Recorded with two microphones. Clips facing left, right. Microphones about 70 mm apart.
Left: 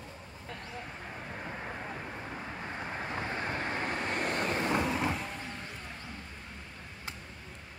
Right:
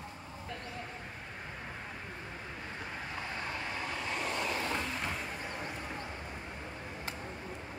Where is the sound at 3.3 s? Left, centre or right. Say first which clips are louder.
Left 3 dB; left.